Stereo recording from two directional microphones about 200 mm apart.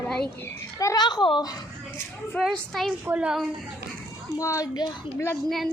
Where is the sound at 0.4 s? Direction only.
15° left (ahead or behind).